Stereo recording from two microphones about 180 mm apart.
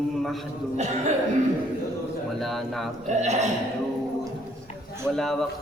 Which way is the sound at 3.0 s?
40° right (ahead or behind).